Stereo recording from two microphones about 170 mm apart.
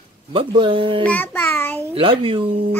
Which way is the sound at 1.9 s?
30° right (ahead or behind).